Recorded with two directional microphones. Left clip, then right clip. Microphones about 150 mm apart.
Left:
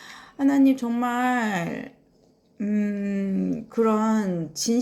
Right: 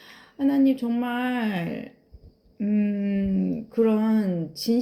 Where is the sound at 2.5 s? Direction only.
20° right (ahead or behind).